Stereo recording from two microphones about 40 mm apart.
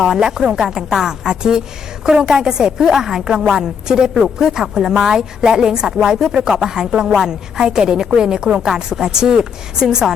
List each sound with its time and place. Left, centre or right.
0.0 s a woman's voice: centre